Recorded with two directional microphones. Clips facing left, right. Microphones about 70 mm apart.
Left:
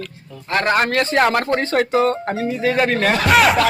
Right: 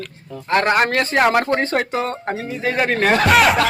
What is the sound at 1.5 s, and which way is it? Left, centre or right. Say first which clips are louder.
Speech: left 2 dB; centre.